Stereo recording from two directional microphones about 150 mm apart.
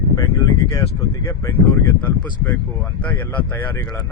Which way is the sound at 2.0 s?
10° left (ahead or behind).